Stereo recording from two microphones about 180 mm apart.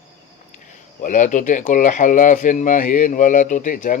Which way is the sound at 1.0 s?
45° left (ahead or behind).